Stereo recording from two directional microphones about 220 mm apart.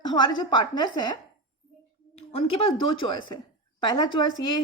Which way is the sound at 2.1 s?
30° left (ahead or behind).